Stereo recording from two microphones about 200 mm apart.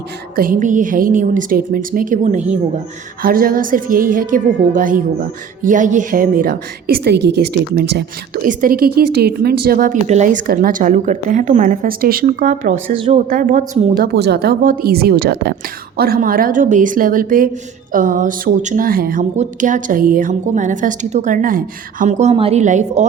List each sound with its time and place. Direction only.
0.3 s a woman's voice: 45° right (ahead or behind)
14.0 s a woman's voice: 55° right (ahead or behind); by 23.0 s 35° right (ahead or behind)